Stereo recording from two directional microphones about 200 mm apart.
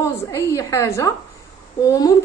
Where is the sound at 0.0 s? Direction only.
15° left (ahead or behind).